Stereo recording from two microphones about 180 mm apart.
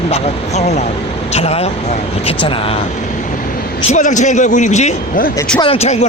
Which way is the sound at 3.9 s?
45° left (ahead or behind).